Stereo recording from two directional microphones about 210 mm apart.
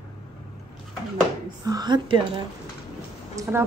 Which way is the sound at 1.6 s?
20° right (ahead or behind).